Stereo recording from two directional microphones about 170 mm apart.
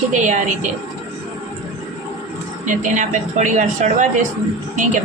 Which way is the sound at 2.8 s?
50° right (ahead or behind).